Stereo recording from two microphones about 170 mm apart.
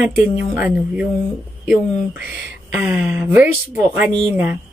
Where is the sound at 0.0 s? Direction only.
5° right (ahead or behind).